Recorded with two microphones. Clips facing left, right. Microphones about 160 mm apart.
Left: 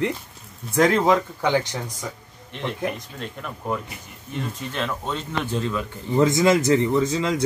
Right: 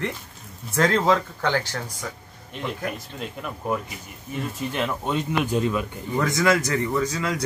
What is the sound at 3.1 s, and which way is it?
Speech, 5° right (ahead or behind).